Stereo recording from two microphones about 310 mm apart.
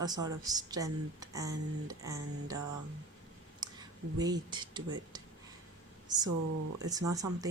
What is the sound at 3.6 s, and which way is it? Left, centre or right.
A woman's voice, centre.